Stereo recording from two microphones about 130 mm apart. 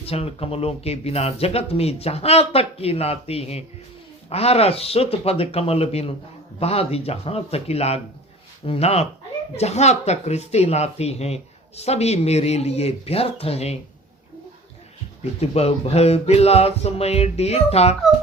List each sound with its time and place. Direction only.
0.0 s speech: 50° left (ahead or behind)
15.2 s speech: 55° left (ahead or behind)